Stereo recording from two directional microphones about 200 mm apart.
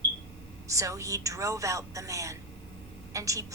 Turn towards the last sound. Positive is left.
turn(degrees=-15)  # may be behind; listen again after turning